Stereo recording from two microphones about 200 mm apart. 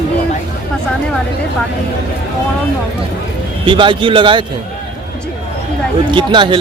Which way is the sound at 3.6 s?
25° right (ahead or behind).